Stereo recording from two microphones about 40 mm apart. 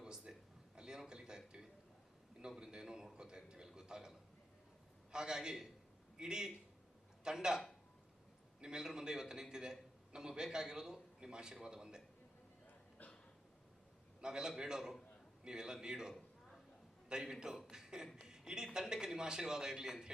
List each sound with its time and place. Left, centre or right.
0.0 s a sound: centre
0.8 s a man's voice: centre
2.6 s a man's voice: centre
5.1 s a man's voice: centre
14.2 s a man's voice: centre
17.7 s beatboxing: centre
18.3 s a man's voice: centre